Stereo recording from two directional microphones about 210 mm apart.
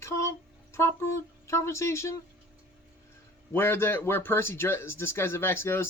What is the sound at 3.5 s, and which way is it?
Speech, 10° left (ahead or behind).